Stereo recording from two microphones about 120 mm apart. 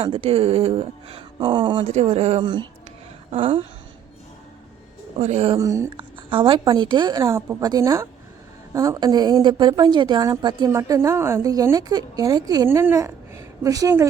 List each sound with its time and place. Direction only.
0.0 s speech: 55° right (ahead or behind)
1.8 s speech: 60° right (ahead or behind)
2.4 s a woman's voice: 40° right (ahead or behind)
5.2 s speech: 60° right (ahead or behind)
5.5 s a woman's voice: 25° right (ahead or behind)
6.0 s a sound: 45° right (ahead or behind)
6.7 s a woman's voice: 40° right (ahead or behind)
12.6 s a woman's voice: 20° right (ahead or behind)